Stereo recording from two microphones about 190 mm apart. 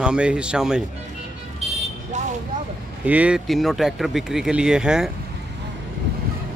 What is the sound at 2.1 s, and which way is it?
Vehicle, 40° right (ahead or behind).